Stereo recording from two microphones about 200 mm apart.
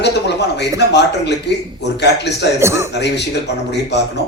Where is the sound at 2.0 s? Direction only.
60° left (ahead or behind).